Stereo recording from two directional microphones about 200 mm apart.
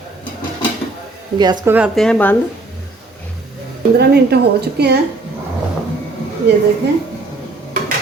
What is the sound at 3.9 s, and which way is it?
Speech, 55° right (ahead or behind).